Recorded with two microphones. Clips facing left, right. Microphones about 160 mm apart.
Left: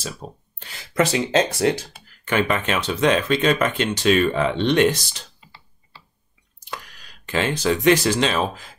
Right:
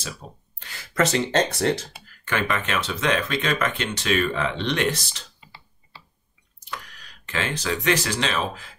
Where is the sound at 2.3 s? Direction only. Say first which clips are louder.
Left 4 dB; 20° left (ahead or behind).